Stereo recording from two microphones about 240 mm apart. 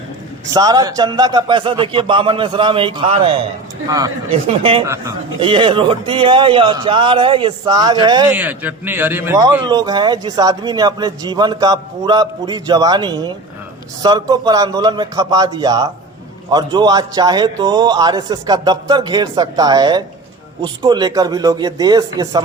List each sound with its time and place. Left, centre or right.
0.5 s a man's voice: centre
4.9 s a man's voice: centre
5.5 s a man's voice: right